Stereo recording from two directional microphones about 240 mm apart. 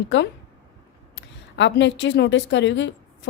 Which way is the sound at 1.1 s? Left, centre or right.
Left.